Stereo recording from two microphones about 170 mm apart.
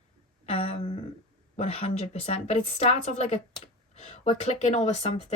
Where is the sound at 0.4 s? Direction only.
35° left (ahead or behind).